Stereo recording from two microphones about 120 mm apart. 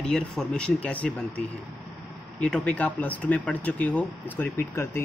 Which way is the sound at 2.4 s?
5° left (ahead or behind).